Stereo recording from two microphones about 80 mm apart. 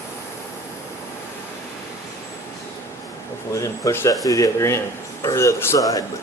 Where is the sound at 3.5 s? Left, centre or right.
Left.